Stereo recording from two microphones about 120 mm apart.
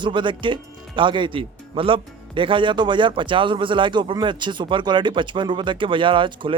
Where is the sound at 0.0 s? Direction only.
40° right (ahead or behind).